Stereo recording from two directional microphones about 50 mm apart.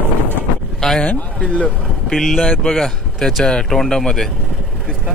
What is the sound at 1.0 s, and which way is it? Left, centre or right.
Speech, left.